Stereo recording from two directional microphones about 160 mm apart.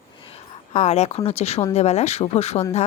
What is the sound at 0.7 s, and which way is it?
Speech, 45° left (ahead or behind).